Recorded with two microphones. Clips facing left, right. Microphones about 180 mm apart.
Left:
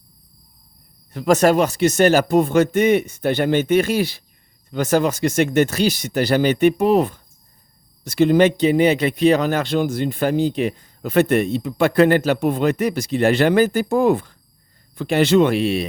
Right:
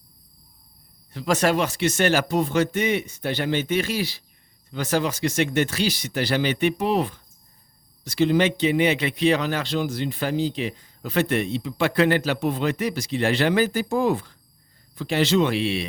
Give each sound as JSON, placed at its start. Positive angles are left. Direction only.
{"t": 1.1, "sound": "a man's voice", "side_deg": 45}